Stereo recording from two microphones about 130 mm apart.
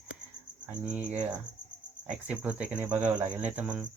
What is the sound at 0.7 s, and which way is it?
Cricket, 10° right (ahead or behind).